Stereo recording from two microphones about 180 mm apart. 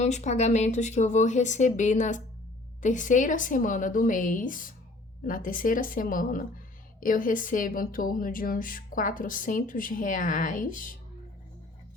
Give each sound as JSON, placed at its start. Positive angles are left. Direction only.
{"t": 0.0, "sound": "a woman's voice", "side_deg": 40}